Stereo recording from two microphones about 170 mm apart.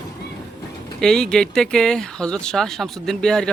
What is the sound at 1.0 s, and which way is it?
Speech, 5° left (ahead or behind).